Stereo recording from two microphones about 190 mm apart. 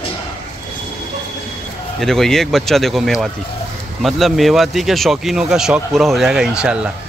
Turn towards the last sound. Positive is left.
turn(degrees=-5)  # may be behind; listen again after turning